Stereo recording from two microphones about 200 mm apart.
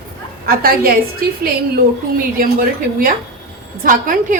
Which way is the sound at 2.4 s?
45° right (ahead or behind).